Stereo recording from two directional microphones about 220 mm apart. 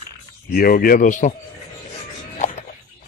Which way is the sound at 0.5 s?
40° left (ahead or behind).